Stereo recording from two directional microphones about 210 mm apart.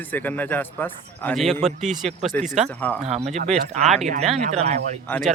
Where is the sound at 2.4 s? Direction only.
35° right (ahead or behind).